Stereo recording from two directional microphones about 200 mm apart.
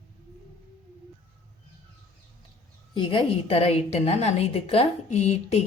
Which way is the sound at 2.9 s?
25° left (ahead or behind).